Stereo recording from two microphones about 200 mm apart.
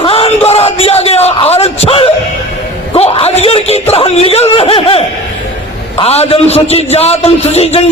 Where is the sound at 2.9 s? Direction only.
30° left (ahead or behind).